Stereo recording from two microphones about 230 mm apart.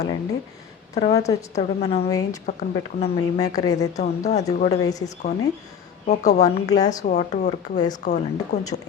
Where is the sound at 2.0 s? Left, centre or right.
Centre.